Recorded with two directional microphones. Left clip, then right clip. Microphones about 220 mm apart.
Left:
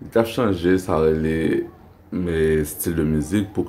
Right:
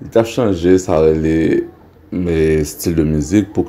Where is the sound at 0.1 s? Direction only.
15° right (ahead or behind).